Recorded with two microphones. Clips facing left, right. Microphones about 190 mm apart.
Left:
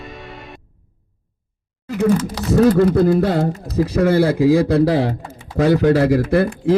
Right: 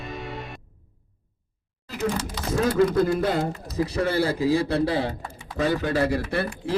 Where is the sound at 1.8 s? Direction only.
70° left (ahead or behind).